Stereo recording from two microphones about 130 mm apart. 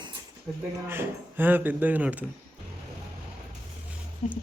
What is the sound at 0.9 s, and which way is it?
Speech, 15° right (ahead or behind).